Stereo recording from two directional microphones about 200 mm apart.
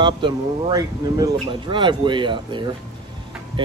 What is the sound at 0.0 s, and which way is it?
Speech, 20° right (ahead or behind).